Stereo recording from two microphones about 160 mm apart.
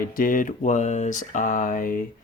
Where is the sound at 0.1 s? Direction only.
60° left (ahead or behind).